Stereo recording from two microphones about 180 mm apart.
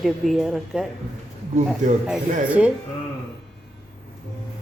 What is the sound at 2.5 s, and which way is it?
Speech, 5° right (ahead or behind).